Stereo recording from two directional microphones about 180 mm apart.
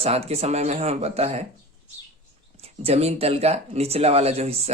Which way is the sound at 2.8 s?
35° right (ahead or behind).